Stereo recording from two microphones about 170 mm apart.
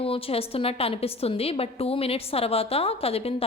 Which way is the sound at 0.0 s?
35° left (ahead or behind).